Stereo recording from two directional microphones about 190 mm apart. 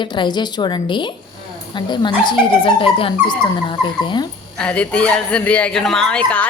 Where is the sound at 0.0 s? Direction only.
25° left (ahead or behind).